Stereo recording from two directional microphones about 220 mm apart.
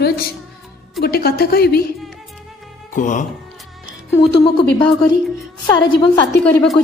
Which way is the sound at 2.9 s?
35° left (ahead or behind).